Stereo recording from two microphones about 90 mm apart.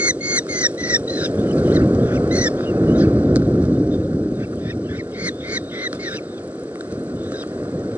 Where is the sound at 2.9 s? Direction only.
20° right (ahead or behind).